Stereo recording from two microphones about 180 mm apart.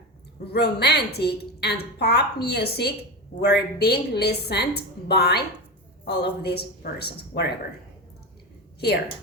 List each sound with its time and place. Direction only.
0.4 s a woman's voice: 65° left (ahead or behind)